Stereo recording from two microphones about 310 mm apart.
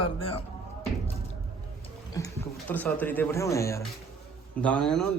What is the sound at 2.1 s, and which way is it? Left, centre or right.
Speech, centre.